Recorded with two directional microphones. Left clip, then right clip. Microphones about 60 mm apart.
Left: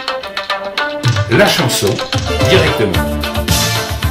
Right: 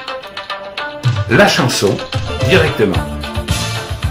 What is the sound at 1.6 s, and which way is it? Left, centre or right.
Speech, left.